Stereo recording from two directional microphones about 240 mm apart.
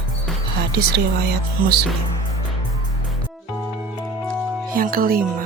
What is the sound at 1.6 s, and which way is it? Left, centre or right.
Music, right.